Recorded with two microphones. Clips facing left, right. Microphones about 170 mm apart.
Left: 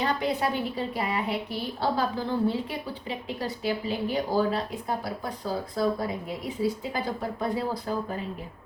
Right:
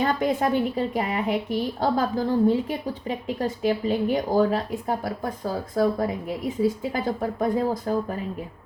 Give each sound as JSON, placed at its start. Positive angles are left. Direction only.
{"t": 0.0, "sound": "a woman's voice", "side_deg": -45}